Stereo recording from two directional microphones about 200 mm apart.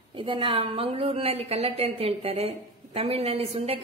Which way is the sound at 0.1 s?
25° right (ahead or behind).